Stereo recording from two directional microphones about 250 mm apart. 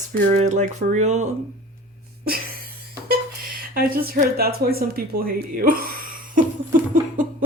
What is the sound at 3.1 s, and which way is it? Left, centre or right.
Speech, right.